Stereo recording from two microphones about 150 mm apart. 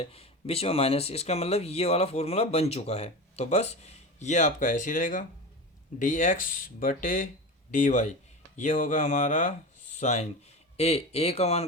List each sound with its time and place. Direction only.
0.0 s speech: 40° left (ahead or behind)